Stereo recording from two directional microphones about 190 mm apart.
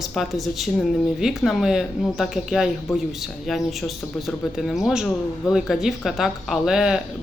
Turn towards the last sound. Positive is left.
turn(degrees=-5)  # may be behind; listen again after turning